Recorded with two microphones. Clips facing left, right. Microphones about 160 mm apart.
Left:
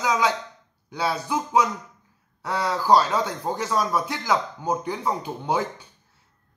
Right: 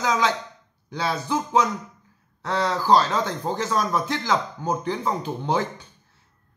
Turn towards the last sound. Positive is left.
turn(degrees=10)  # may be behind; listen again after turning